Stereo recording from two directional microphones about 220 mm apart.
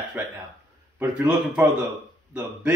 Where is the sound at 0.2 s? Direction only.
5° right (ahead or behind).